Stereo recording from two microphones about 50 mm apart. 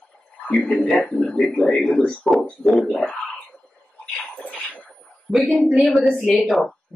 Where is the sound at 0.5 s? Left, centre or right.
Centre.